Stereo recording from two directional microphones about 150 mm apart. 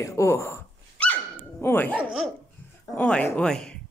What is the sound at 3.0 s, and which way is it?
Speech, 10° left (ahead or behind).